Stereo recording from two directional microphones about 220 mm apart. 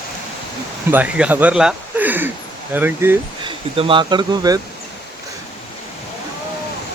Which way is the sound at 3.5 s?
25° right (ahead or behind).